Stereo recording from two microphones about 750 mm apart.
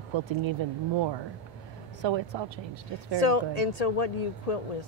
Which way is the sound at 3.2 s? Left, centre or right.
Left.